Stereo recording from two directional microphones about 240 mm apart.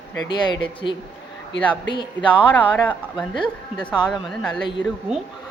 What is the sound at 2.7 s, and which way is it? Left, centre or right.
Speech, centre.